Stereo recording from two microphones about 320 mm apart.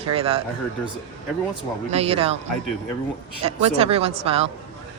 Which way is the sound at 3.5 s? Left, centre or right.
Centre.